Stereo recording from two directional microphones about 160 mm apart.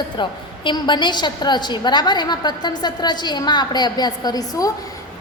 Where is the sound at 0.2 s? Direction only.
30° left (ahead or behind).